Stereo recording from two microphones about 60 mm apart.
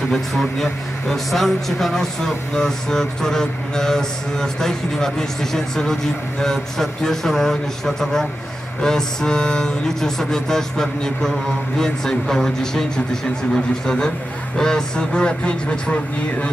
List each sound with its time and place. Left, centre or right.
0.1 s a man's voice: centre